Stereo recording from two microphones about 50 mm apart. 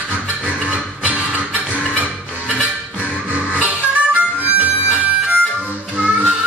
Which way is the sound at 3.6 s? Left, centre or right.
Right.